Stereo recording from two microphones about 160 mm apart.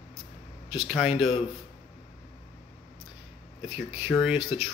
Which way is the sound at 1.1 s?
35° left (ahead or behind).